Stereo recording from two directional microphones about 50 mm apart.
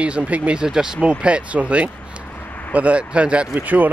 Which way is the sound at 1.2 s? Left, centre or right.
Right.